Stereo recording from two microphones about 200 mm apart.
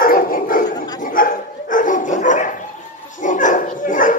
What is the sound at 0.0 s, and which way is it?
Dog, 45° left (ahead or behind).